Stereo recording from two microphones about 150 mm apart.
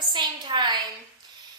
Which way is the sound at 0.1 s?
30° right (ahead or behind).